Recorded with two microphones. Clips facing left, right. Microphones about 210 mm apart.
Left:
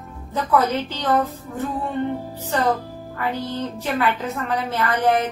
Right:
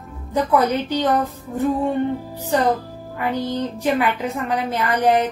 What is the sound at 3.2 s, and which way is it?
A woman's voice, 15° right (ahead or behind).